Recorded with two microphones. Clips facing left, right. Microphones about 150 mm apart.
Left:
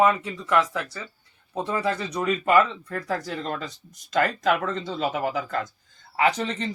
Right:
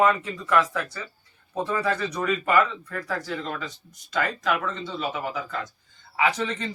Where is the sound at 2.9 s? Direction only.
35° left (ahead or behind).